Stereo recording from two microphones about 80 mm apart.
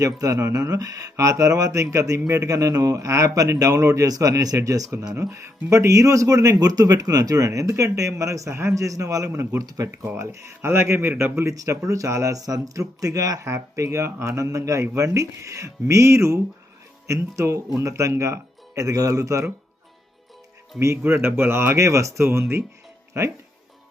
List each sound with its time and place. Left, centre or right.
0.0 s speech: right
20.7 s speech: right